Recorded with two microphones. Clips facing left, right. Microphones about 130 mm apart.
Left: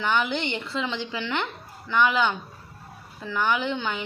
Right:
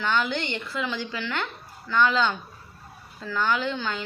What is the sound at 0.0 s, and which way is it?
A woman's voice, 15° left (ahead or behind).